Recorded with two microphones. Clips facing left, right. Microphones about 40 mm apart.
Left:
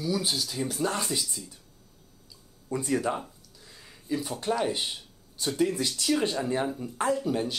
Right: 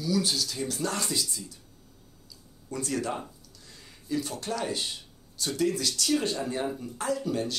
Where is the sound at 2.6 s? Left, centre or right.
Centre.